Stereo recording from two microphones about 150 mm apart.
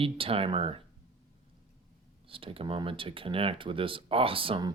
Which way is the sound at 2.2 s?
35° right (ahead or behind).